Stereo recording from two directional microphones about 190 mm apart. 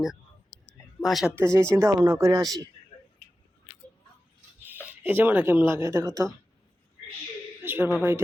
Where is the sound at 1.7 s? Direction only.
15° right (ahead or behind).